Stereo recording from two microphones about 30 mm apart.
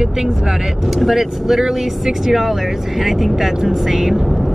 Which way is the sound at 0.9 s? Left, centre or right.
Centre.